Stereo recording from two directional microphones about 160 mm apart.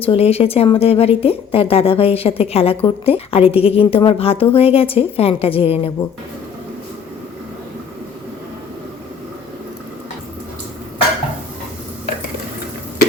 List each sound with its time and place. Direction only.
0.0 s a woman's voice: 40° left (ahead or behind)